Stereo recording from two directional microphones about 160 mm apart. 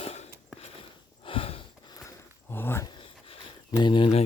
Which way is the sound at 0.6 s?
35° left (ahead or behind).